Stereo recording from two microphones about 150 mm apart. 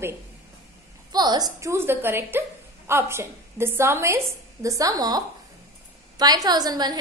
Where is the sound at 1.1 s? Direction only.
30° right (ahead or behind).